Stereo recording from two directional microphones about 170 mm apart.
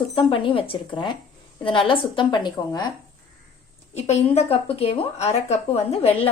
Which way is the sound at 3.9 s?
40° left (ahead or behind).